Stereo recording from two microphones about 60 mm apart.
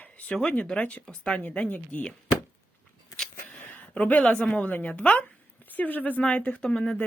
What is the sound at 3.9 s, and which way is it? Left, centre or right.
Speech, left.